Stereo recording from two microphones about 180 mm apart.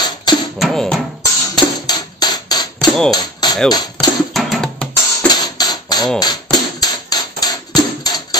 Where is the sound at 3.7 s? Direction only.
20° left (ahead or behind).